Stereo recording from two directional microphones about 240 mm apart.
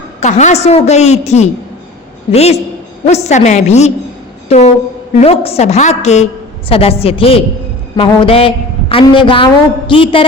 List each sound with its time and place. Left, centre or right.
0.2 s a woman's voice: left
4.4 s a sound: left
5.2 s a woman's voice: left